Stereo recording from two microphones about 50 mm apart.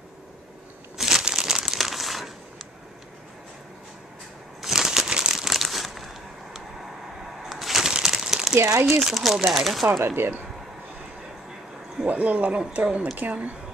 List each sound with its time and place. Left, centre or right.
0.9 s crushing: centre
1.2 s crumpling: centre
4.6 s crumpling: centre
7.4 s a sound: centre
8.5 s speech: right
9.0 s speech: centre
10.0 s speech: right
12.1 s speech: right